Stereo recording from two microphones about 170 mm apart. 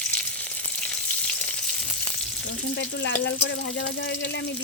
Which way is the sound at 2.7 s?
90° left.